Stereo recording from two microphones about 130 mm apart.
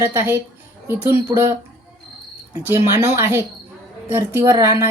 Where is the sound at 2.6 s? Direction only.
20° right (ahead or behind).